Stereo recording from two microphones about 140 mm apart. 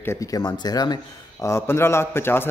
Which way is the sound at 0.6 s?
30° left (ahead or behind).